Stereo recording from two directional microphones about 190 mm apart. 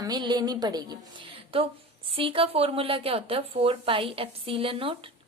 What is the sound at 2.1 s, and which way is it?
A woman's voice, 30° right (ahead or behind).